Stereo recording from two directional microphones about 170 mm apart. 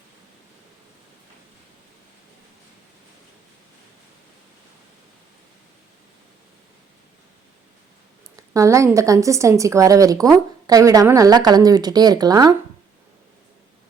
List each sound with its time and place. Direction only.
8.4 s a woman's voice: 20° right (ahead or behind)